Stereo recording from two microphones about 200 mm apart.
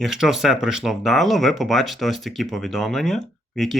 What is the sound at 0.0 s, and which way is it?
Speech, centre (ahead or behind).